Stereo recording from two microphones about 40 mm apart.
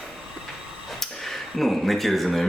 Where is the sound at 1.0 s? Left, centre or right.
Centre.